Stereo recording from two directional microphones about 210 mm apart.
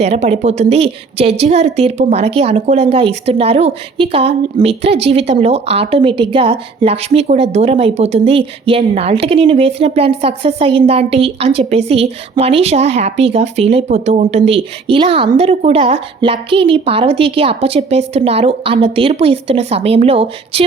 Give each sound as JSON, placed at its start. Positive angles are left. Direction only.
{"t": 0.0, "sound": "a woman's voice", "side_deg": -30}